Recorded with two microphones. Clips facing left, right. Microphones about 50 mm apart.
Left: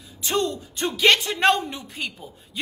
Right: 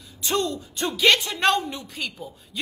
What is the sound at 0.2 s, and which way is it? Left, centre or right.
A woman's voice, left.